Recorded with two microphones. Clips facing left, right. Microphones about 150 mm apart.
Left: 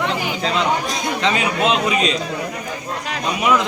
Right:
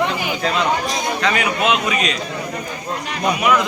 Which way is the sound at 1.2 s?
25° left (ahead or behind).